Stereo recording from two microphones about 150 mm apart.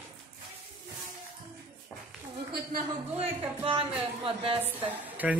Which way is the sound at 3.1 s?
40° right (ahead or behind).